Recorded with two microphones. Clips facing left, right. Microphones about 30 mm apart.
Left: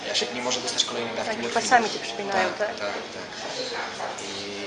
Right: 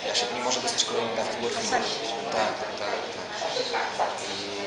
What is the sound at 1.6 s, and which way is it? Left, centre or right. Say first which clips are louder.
Speech: left 9 dB; left.